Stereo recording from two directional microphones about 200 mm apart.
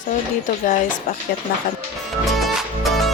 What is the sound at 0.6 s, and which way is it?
Speech, 40° left (ahead or behind).